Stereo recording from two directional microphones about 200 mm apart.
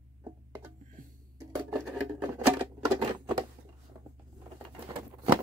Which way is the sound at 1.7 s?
5° right (ahead or behind).